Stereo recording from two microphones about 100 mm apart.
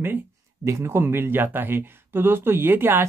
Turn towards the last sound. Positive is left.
turn(degrees=-20)  # may be behind; listen again after turning